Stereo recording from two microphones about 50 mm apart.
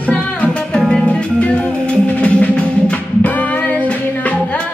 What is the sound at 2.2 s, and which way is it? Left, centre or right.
Music, left.